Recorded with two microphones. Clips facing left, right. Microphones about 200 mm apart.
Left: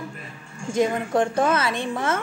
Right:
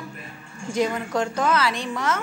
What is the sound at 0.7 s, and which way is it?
Speech, 25° left (ahead or behind).